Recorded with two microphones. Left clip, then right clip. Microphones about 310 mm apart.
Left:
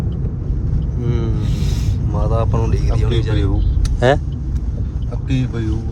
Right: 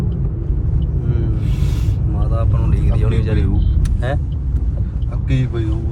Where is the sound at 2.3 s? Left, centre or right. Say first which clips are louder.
Left 6 dB; centre.